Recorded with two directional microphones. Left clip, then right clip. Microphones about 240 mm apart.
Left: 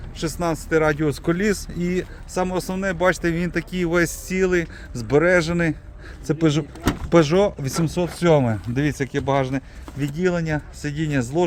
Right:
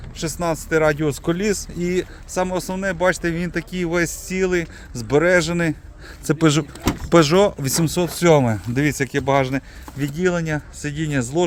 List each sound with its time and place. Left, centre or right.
0.2 s speech: centre
6.2 s speech: right; by 11.4 s centre